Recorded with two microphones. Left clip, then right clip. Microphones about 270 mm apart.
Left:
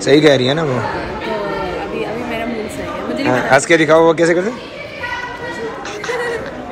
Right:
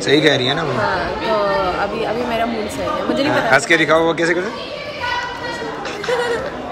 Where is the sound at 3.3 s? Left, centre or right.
Centre.